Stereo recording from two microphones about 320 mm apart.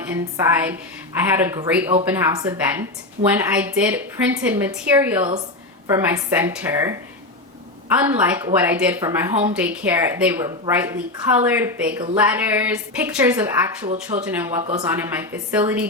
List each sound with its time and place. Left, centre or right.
0.1 s a woman's voice: centre
7.9 s a woman's voice: centre
13.8 s speech: right
14.3 s a woman's voice: centre